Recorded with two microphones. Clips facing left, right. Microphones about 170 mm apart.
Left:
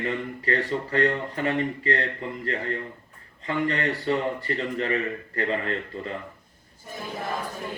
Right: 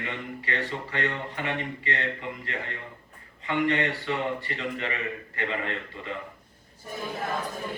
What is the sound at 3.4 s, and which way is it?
A man's voice, 40° left (ahead or behind).